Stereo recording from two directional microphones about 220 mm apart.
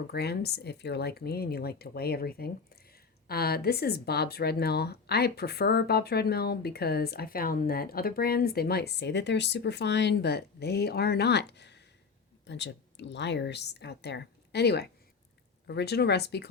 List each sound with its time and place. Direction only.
0.1 s speech: 45° left (ahead or behind)